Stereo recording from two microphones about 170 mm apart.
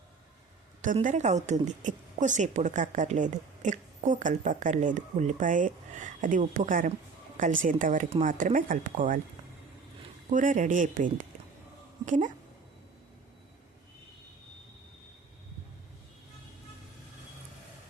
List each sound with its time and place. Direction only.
1.0 s a woman's voice: 45° right (ahead or behind)
10.2 s a woman's voice: 50° right (ahead or behind)